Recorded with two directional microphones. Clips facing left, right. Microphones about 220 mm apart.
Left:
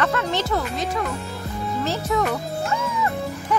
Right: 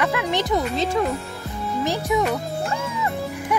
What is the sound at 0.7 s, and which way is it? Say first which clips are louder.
Speech: right 4 dB; 25° right (ahead or behind).